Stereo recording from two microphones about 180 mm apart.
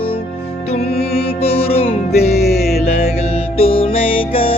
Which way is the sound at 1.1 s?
30° left (ahead or behind).